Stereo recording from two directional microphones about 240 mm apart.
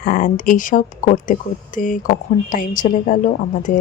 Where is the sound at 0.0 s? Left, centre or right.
Left.